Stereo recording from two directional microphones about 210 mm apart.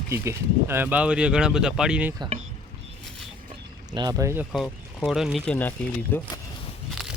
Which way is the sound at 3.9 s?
20° right (ahead or behind).